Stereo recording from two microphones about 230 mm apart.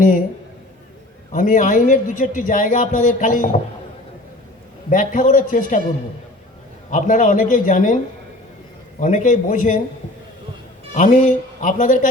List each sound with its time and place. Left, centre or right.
1.3 s a man's voice: left
4.9 s a man's voice: left
6.9 s a man's voice: left
9.0 s a man's voice: left
10.9 s a man's voice: left